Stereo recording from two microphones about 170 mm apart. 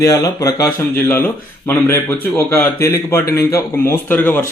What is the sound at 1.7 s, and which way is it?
Speech, 15° left (ahead or behind).